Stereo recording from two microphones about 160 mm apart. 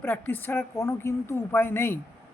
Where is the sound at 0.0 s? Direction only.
10° left (ahead or behind).